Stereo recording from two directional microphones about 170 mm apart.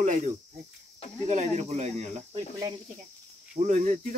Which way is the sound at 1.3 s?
40° right (ahead or behind).